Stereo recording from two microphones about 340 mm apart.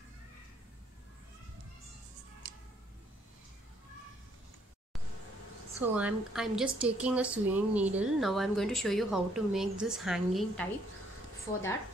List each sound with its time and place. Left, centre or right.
5.8 s speech: centre